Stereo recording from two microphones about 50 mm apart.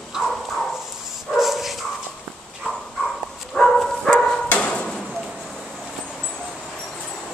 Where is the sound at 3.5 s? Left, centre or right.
Centre.